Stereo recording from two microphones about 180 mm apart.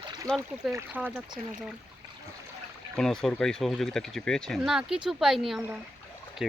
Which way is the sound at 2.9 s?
5° left (ahead or behind).